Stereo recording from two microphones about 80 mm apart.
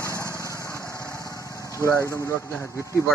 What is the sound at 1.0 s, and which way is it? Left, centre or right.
Vehicle, left.